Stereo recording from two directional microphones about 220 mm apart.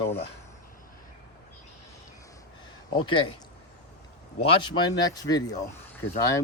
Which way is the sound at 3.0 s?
20° left (ahead or behind).